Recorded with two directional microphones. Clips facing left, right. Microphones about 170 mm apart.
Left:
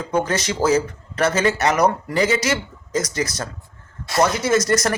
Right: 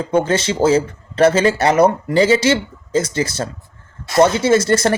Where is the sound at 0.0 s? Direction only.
30° right (ahead or behind).